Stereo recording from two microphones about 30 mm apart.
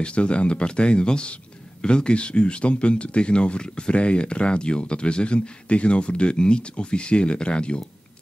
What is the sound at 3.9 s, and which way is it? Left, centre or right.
Speech, left.